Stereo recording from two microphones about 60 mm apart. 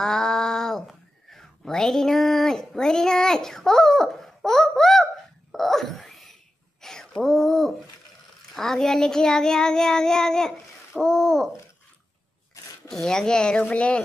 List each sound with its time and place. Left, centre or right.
0.0 s speech: centre
5.5 s a sound: centre
8.5 s child singing: centre
11.0 s owl: centre
12.6 s a sound: left
12.9 s child singing: centre